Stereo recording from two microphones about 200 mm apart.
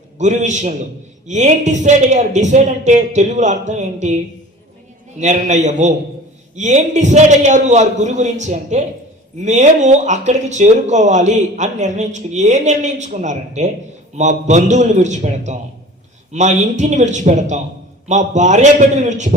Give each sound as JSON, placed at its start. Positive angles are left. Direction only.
{"t": 0.2, "sound": "speech", "side_deg": -35}
{"t": 5.2, "sound": "speech", "side_deg": -35}